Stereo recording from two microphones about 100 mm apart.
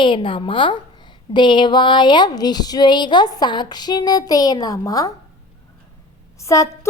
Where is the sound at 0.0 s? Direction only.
55° left (ahead or behind).